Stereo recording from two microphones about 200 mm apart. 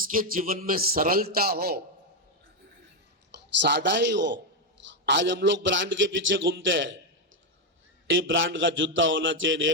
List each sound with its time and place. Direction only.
0.0 s a man's voice: 45° right (ahead or behind)
3.3 s a man's voice: 55° right (ahead or behind)
8.0 s a man's voice: 70° right (ahead or behind)